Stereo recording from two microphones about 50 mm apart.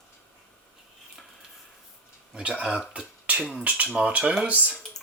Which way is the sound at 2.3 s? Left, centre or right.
Right.